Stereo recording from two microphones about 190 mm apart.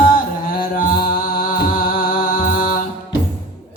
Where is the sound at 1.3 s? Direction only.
50° left (ahead or behind).